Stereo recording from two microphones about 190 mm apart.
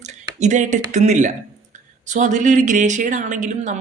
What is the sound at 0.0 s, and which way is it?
Speech, 40° right (ahead or behind).